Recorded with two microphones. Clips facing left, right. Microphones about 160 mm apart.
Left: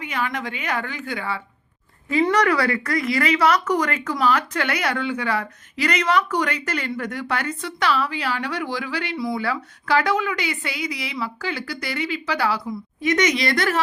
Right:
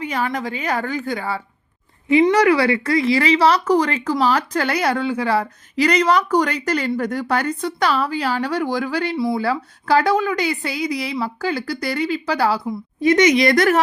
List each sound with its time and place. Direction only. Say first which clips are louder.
0.0 s speech: right 4 dB; 35° right (ahead or behind)
2.1 s speech: right 5 dB; 25° right (ahead or behind); by 13.8 s 45° right (ahead or behind)